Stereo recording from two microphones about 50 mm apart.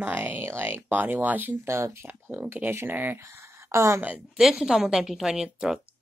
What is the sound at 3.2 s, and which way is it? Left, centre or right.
Speech, right.